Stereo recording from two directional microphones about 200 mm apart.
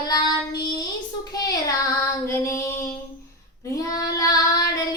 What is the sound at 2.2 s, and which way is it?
Female singing, 10° left (ahead or behind).